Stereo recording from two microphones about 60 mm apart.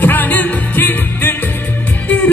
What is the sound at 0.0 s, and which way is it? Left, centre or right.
Music, left.